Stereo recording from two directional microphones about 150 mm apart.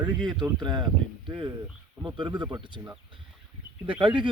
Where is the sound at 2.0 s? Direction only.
30° right (ahead or behind).